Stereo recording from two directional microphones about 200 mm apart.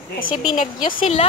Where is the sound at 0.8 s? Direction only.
25° left (ahead or behind).